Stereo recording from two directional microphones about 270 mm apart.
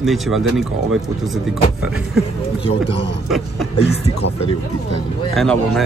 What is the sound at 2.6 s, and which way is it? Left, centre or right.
Speech, centre.